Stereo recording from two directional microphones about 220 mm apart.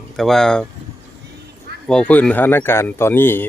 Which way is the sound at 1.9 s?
5° left (ahead or behind).